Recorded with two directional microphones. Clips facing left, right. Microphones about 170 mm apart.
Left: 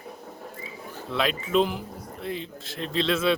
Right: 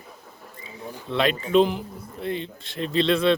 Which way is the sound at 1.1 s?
Centre (ahead or behind).